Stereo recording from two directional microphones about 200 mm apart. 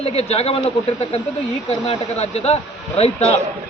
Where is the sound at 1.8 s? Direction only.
30° left (ahead or behind).